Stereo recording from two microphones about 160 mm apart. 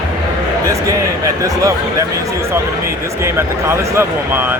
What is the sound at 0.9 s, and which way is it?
Speech, 20° right (ahead or behind).